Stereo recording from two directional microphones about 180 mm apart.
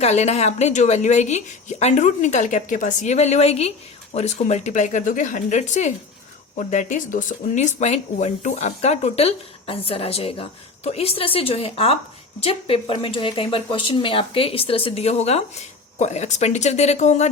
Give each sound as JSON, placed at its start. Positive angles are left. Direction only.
{"t": 0.0, "sound": "speech", "side_deg": 35}